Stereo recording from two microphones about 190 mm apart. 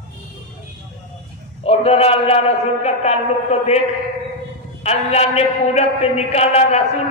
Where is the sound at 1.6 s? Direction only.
30° left (ahead or behind).